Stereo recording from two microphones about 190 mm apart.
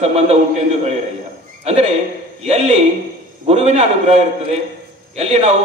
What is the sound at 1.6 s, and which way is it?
A man's voice, 35° right (ahead or behind).